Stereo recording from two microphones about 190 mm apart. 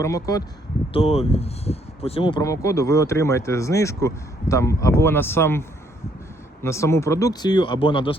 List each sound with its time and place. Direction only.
0.0 s speech: 20° left (ahead or behind)
0.9 s speech: 30° left (ahead or behind)